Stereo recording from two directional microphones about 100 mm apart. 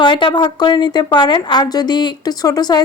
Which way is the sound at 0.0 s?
50° left (ahead or behind).